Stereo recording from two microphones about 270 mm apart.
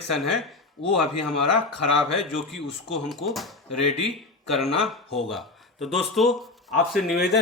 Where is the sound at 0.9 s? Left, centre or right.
Left.